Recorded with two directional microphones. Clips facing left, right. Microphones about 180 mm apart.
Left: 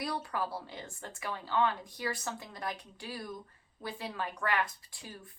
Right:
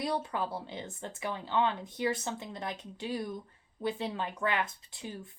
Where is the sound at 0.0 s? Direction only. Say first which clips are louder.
Right 3 dB; 20° right (ahead or behind).